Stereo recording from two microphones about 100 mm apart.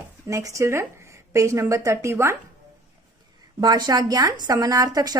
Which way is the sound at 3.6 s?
45° right (ahead or behind).